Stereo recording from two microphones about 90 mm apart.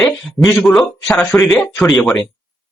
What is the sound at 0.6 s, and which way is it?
Speech, 5° left (ahead or behind).